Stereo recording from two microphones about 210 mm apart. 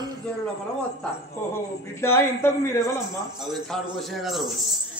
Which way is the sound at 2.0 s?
10° left (ahead or behind).